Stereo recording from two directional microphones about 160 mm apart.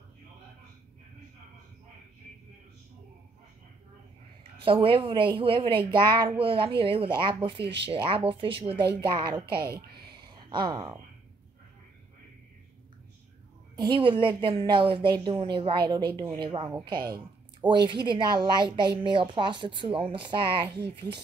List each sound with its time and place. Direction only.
4.8 s a woman's voice: 35° right (ahead or behind)
9.5 s a child's voice: 80° right
10.0 s a sound: 30° right (ahead or behind)
13.7 s a woman's voice: 30° right (ahead or behind)
20.7 s speech: 90° right